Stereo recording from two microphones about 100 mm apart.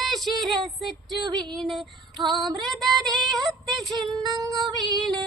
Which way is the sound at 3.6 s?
Centre (ahead or behind).